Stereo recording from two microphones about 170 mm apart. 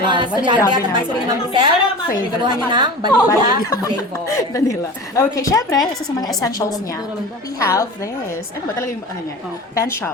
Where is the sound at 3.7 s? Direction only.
20° left (ahead or behind).